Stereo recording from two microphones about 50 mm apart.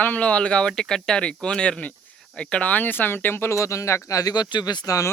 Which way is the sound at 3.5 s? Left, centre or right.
Left.